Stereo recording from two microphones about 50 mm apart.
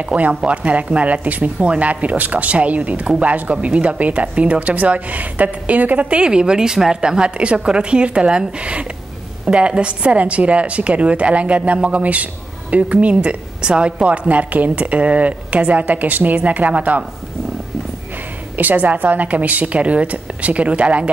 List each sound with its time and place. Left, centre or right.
0.0 s a woman's voice: right
18.6 s a woman's voice: right